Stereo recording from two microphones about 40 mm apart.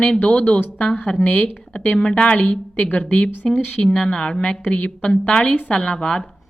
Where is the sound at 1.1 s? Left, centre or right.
Left.